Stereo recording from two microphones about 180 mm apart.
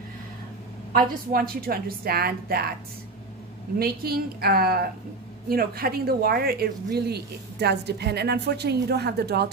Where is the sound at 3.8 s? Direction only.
60° right (ahead or behind).